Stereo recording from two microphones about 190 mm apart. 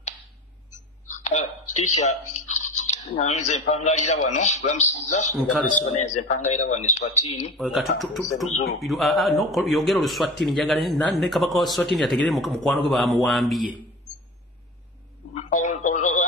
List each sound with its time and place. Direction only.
0.7 s a sound: 40° left (ahead or behind)
2.5 s speech: 40° left (ahead or behind)
5.3 s a man's voice: 10° left (ahead or behind)
5.9 s speech: 40° left (ahead or behind)
7.5 s a man's voice: centre (ahead or behind)
8.5 s speech: 35° left (ahead or behind)
8.8 s a man's voice: centre (ahead or behind)
15.3 s telephone: 40° left (ahead or behind)